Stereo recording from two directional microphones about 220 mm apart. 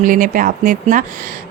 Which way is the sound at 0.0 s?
40° right (ahead or behind).